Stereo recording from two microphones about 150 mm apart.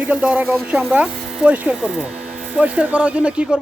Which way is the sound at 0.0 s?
5° right (ahead or behind).